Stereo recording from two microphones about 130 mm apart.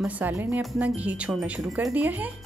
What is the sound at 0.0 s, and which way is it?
Speech, 15° right (ahead or behind).